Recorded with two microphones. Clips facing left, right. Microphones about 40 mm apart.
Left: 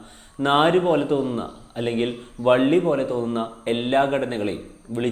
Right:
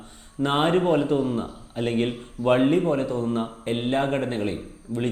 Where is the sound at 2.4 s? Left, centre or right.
Left.